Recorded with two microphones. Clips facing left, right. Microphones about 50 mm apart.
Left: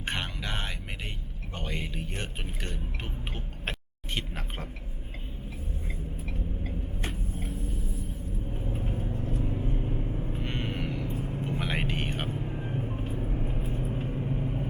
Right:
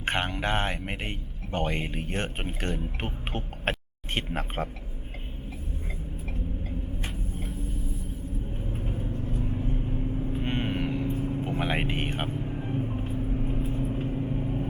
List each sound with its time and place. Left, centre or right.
0.0 s speech: right
8.7 s vehicle: centre
10.4 s vehicle: right
11.1 s vehicle: centre
11.4 s speech: centre
12.3 s vehicle: centre